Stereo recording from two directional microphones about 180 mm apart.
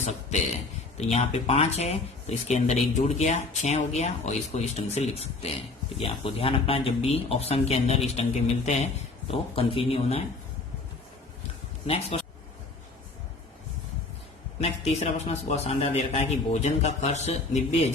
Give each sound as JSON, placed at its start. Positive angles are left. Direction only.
{"t": 0.0, "sound": "a man's voice", "side_deg": 40}
{"t": 11.9, "sound": "speech", "side_deg": 35}
{"t": 14.6, "sound": "speech", "side_deg": 35}